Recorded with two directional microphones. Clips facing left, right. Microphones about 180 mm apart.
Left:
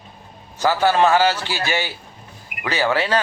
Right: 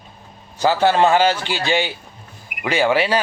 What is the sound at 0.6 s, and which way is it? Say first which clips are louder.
Speech: right 1 dB; 20° right (ahead or behind).